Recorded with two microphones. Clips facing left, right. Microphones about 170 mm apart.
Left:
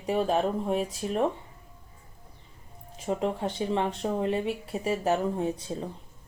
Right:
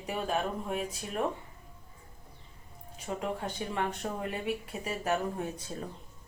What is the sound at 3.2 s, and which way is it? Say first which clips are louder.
Speech: left 4 dB; 25° left (ahead or behind).